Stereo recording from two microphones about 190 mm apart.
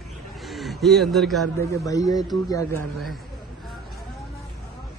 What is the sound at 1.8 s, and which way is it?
Speech, 20° left (ahead or behind).